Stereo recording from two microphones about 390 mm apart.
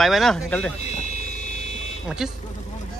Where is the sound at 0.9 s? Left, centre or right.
Centre.